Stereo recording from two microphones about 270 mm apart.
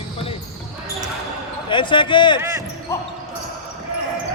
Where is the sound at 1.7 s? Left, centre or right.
Centre.